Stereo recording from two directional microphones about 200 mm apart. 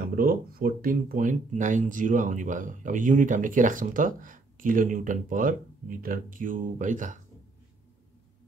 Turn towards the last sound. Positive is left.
turn(degrees=-40)  # may be behind; listen again after turning